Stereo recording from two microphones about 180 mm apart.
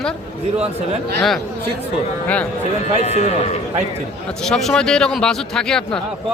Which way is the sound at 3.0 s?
35° left (ahead or behind).